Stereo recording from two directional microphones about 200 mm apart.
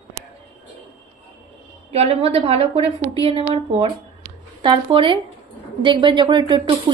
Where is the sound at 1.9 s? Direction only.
30° right (ahead or behind).